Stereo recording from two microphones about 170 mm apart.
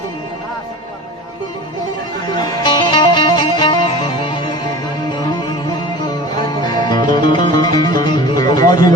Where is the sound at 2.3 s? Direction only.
25° left (ahead or behind).